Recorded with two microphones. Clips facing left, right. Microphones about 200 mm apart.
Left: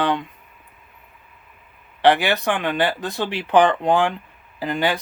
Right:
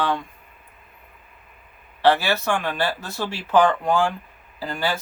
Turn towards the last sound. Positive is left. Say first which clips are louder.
# left 4 dB
turn(degrees=20)  # may be behind; listen again after turning